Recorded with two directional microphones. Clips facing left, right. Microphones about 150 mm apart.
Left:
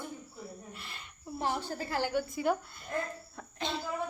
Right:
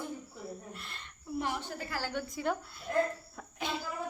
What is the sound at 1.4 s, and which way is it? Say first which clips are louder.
Speech: left 3 dB; 35° left (ahead or behind).